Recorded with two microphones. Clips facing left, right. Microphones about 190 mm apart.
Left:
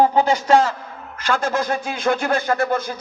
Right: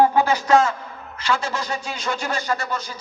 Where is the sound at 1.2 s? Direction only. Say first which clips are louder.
Left 4 dB; 50° left (ahead or behind).